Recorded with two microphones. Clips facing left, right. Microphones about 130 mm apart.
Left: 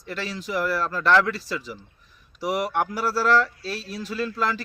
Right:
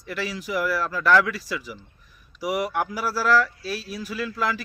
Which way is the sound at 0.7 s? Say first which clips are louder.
Even; 25° left (ahead or behind).